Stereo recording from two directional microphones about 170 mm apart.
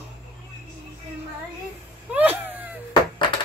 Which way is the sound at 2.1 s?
10° right (ahead or behind).